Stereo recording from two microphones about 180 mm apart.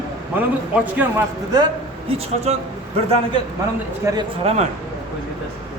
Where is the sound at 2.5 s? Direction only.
35° right (ahead or behind).